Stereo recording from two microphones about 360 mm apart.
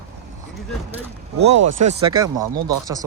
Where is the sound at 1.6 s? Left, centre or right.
Right.